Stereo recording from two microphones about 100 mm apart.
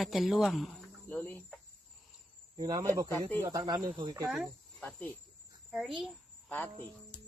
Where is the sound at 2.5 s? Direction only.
40° right (ahead or behind).